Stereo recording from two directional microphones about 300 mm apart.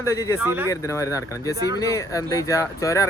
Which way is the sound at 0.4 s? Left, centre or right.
Centre.